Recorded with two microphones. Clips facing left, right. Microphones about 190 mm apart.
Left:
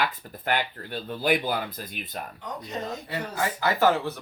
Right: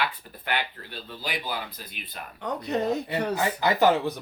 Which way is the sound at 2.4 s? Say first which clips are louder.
Right 11 dB; 65° right (ahead or behind).